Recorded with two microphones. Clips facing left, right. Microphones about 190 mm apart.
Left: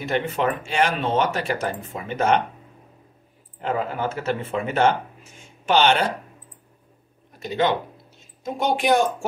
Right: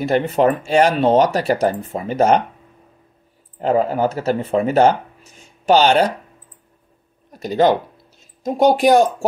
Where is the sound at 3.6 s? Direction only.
40° right (ahead or behind).